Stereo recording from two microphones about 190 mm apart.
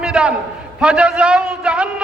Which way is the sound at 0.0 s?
5° right (ahead or behind).